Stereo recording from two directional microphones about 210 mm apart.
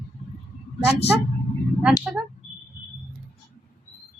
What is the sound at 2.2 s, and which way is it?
Speech, 5° right (ahead or behind).